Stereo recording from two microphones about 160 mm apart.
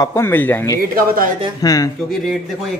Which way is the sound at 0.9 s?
65° right (ahead or behind).